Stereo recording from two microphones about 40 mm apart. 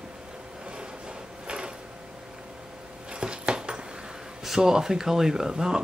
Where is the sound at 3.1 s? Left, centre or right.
Right.